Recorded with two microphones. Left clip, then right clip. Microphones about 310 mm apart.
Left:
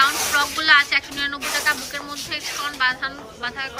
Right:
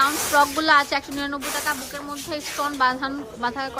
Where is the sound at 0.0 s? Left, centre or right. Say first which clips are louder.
Even; centre.